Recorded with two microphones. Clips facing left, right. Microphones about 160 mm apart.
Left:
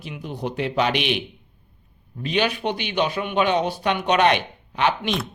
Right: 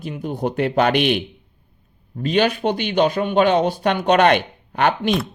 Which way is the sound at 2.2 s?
45° right (ahead or behind).